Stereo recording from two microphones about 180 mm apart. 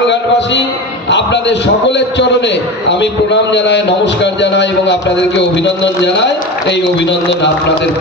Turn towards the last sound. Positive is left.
turn(degrees=80)